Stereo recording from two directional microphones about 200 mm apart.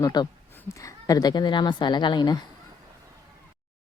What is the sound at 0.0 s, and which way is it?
A woman's voice, 20° left (ahead or behind).